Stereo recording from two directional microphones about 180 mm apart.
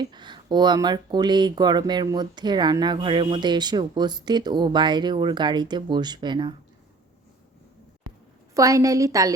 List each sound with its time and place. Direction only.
0.0 s speech: 25° right (ahead or behind)
8.5 s a woman's voice: 20° right (ahead or behind)